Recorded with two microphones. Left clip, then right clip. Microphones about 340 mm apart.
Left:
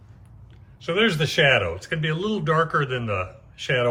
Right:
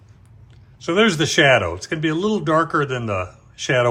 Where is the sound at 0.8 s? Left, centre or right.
Centre.